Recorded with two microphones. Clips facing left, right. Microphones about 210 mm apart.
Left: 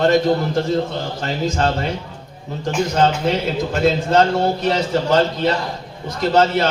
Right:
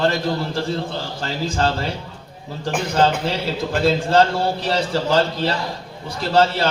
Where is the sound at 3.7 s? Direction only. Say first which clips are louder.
Even; 35° right (ahead or behind).